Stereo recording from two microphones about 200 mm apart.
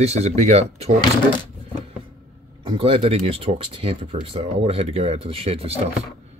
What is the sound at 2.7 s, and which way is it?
Speech, 30° right (ahead or behind).